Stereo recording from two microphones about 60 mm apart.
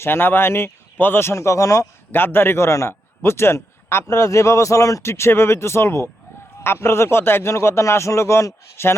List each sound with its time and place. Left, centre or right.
0.0 s speech: left
2.1 s a man's voice: left
4.0 s speech: left
5.0 s speech: left